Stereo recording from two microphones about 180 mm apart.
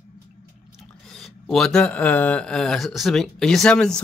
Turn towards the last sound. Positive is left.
turn(degrees=5)  # may be behind; listen again after turning